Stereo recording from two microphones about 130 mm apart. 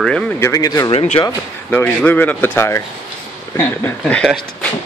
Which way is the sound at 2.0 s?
15° left (ahead or behind).